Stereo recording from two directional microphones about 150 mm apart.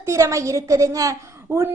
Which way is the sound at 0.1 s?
20° right (ahead or behind).